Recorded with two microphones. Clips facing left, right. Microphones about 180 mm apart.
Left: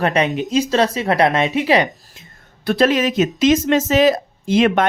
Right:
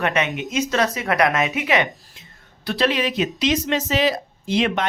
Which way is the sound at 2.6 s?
50° left (ahead or behind).